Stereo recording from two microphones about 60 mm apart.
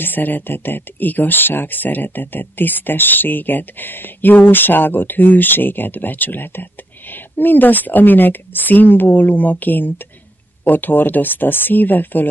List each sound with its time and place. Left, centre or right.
0.0 s speech: left